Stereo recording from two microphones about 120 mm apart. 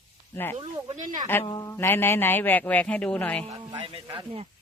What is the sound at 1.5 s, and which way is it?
Speech, 30° left (ahead or behind).